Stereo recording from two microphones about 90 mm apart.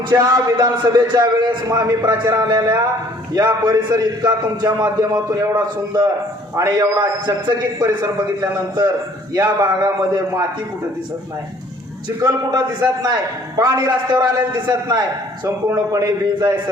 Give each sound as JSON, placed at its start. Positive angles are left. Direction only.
{"t": 0.2, "sound": "a man's voice", "side_deg": -45}
{"t": 12.0, "sound": "a man's voice", "side_deg": -50}